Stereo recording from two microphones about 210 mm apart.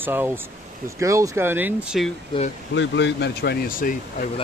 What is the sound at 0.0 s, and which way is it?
Speech, 10° right (ahead or behind).